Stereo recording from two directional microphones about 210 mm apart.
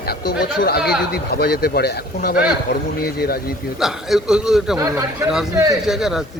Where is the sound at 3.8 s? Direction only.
Centre (ahead or behind).